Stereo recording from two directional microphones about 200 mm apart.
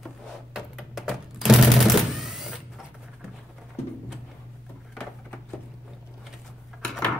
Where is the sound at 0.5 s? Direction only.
Centre (ahead or behind).